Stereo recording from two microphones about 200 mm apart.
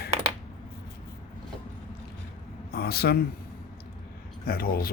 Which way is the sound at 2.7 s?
50° left (ahead or behind).